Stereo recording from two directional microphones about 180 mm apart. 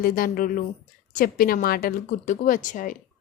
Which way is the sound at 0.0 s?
50° left (ahead or behind).